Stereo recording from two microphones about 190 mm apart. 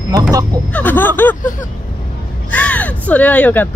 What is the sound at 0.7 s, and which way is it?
Speech, 10° left (ahead or behind).